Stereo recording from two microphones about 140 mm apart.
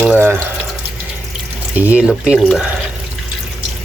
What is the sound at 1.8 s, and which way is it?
Speech, 10° right (ahead or behind).